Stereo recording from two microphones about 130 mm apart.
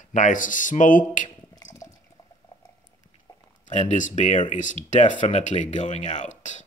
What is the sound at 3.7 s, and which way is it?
Speech, 70° left (ahead or behind).